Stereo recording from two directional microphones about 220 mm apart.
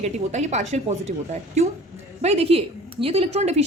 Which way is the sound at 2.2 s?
25° right (ahead or behind).